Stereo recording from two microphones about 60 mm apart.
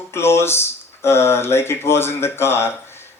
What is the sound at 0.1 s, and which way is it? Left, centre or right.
Speech, left.